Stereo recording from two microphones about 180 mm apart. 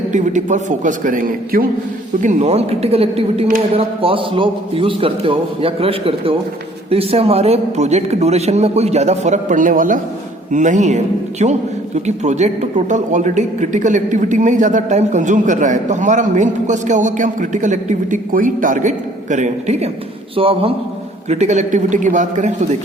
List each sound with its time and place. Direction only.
0.1 s a man's voice: 45° right (ahead or behind)
2.2 s a man's voice: 35° right (ahead or behind)